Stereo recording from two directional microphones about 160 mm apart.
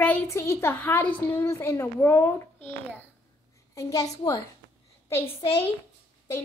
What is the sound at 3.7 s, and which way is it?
Speech, 20° left (ahead or behind).